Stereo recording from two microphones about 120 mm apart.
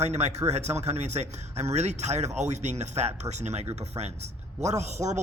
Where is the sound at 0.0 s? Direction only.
65° right (ahead or behind).